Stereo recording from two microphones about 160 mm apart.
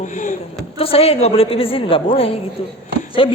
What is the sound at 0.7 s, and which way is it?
A woman's voice, 35° left (ahead or behind).